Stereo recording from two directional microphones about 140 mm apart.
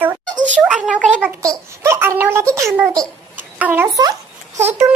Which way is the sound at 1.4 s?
20° right (ahead or behind).